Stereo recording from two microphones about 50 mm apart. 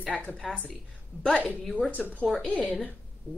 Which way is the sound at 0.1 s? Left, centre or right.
Centre.